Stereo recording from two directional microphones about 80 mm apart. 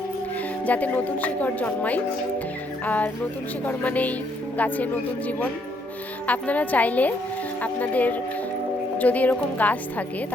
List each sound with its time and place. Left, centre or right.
0.6 s speech: centre
6.2 s speech: centre